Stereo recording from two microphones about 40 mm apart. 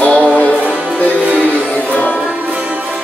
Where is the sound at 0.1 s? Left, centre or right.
Left.